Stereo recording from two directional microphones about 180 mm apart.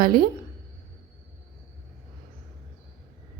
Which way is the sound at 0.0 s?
55° right (ahead or behind).